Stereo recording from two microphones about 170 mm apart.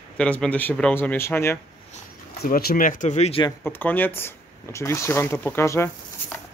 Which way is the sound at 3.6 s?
10° left (ahead or behind).